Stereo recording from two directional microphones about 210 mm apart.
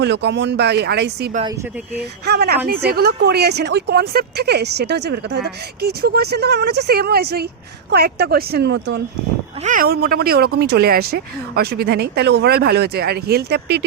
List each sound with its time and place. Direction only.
0.0 s speech: 55° right (ahead or behind)
9.6 s speech: 45° right (ahead or behind)